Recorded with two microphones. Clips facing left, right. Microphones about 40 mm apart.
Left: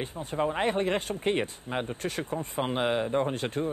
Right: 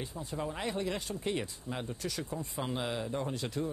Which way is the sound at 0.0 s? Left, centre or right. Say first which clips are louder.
Left 8 dB; left.